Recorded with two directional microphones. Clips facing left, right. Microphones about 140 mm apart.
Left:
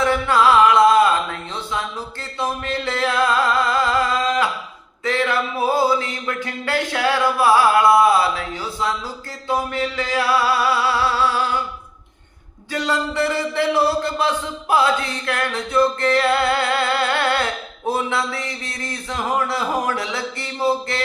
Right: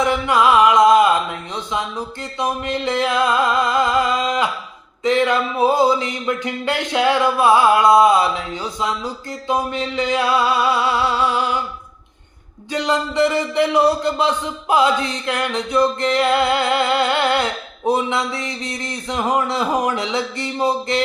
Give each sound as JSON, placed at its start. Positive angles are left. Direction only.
{"t": 0.0, "sound": "music", "side_deg": -15}
{"t": 2.4, "sound": "speech", "side_deg": -20}
{"t": 12.7, "sound": "speech", "side_deg": -20}